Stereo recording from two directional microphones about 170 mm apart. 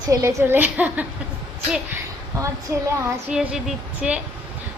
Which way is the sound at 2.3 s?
20° right (ahead or behind).